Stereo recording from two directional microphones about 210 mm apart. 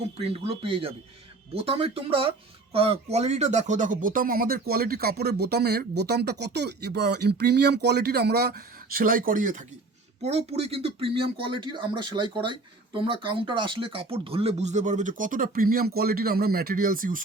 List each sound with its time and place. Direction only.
0.2 s speech: 30° right (ahead or behind)